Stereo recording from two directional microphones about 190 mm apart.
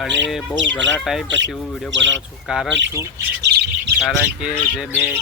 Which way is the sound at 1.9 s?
70° right (ahead or behind).